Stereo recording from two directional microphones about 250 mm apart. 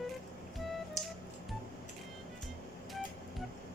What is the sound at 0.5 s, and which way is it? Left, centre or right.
Music, centre.